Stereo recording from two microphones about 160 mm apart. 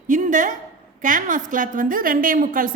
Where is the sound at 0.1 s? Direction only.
55° right (ahead or behind).